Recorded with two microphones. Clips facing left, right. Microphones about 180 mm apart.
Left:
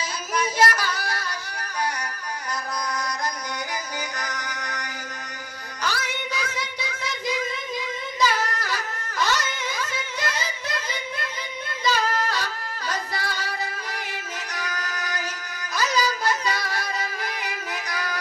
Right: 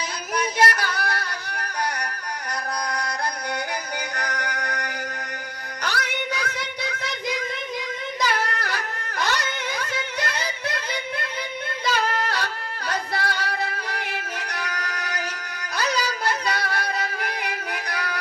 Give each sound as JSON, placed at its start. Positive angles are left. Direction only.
{"t": 0.7, "sound": "yodeling", "side_deg": -60}
{"t": 2.5, "sound": "chant", "side_deg": -60}
{"t": 4.1, "sound": "music", "side_deg": -60}
{"t": 11.8, "sound": "singing", "side_deg": -60}
{"t": 14.5, "sound": "music", "side_deg": -60}